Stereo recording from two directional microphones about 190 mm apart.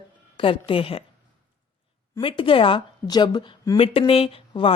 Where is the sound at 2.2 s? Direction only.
30° left (ahead or behind).